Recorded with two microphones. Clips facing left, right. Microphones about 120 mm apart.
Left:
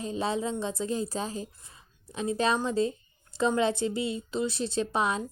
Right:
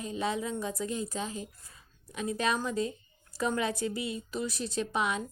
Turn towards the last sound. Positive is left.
turn(degrees=35)  # may be behind; listen again after turning